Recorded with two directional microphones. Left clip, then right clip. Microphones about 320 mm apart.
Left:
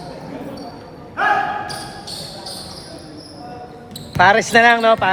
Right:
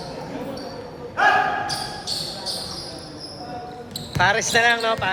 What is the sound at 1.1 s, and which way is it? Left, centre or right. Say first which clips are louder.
Basketball bounce: even; right.